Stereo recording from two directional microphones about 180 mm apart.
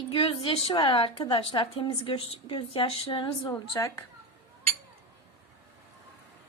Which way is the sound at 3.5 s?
15° left (ahead or behind).